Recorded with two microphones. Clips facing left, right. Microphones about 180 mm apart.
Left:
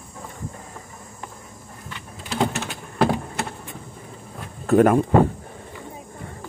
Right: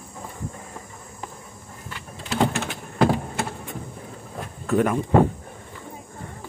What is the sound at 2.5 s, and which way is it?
Typing, centre (ahead or behind).